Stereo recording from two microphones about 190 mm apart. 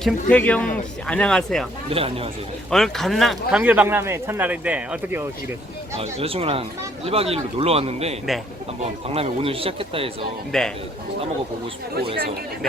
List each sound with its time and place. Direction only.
0.0 s speech: 5° left (ahead or behind)
1.9 s a man's voice: 30° right (ahead or behind)
2.6 s a man's voice: centre (ahead or behind)
6.0 s a man's voice: 30° right (ahead or behind)
10.5 s speech: 5° left (ahead or behind)